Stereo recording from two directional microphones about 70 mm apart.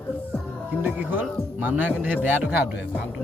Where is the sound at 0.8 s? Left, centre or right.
Right.